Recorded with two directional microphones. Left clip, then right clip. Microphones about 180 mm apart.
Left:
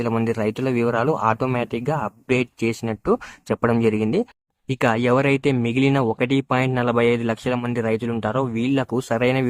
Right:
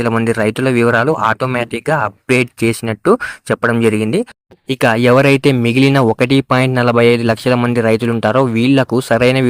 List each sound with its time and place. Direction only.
0.0 s speech: 20° right (ahead or behind)
4.7 s speech: 35° right (ahead or behind)